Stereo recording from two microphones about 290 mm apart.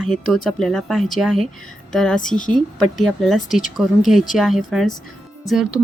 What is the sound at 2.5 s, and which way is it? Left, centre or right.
Speech, centre.